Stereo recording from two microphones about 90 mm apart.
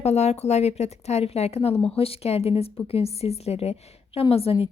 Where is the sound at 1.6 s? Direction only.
90° left.